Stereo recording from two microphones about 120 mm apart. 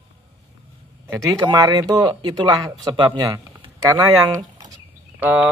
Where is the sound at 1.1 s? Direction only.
25° right (ahead or behind).